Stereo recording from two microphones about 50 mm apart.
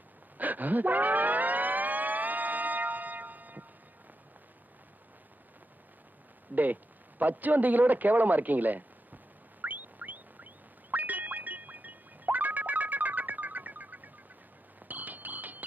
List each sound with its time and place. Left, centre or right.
0.3 s siren: right
6.5 s a man's voice: right
9.6 s a sound: right
10.9 s music: right